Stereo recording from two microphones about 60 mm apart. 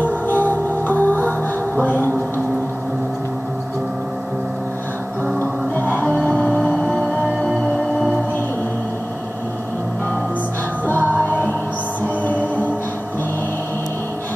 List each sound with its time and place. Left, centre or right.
0.0 s music: left
5.4 s music: left
10.9 s music: left